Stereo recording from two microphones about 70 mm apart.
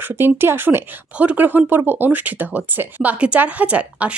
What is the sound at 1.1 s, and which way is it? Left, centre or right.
A woman's voice, right.